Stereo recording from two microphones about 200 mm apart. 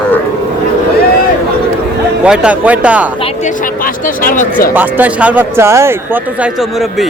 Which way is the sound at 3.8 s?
45° left (ahead or behind).